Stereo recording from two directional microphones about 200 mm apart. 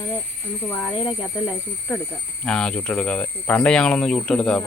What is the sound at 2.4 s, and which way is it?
Speech, 5° left (ahead or behind).